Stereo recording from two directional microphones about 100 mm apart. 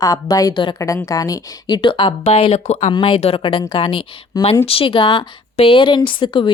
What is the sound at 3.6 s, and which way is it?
Speech, 55° left (ahead or behind).